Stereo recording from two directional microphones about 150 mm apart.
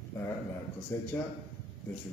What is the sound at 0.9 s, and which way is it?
Speech, 15° left (ahead or behind).